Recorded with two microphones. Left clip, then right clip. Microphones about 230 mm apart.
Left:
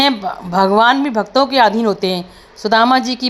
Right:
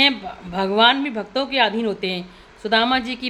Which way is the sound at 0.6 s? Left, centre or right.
Left.